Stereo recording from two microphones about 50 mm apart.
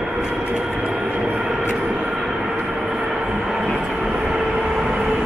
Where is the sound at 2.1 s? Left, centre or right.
Centre.